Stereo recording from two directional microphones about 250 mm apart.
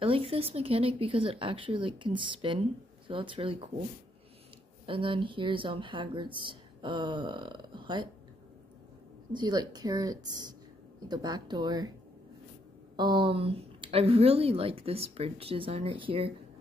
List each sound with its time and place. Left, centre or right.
0.0 s speech: right
4.8 s speech: right
9.3 s speech: centre
12.9 s speech: centre